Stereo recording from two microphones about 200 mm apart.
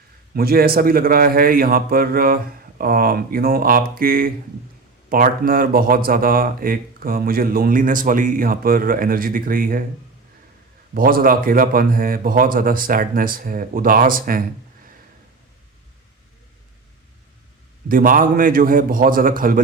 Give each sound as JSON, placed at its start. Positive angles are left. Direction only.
{"t": 0.3, "sound": "speech", "side_deg": -50}
{"t": 10.9, "sound": "speech", "side_deg": -45}
{"t": 17.8, "sound": "speech", "side_deg": -45}